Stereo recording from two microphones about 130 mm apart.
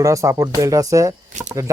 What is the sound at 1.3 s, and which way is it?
Speech, 70° right (ahead or behind).